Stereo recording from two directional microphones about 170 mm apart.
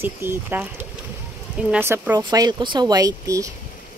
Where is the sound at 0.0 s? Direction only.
15° right (ahead or behind).